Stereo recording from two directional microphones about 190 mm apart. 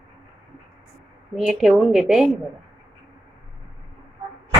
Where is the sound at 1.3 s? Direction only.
Centre (ahead or behind).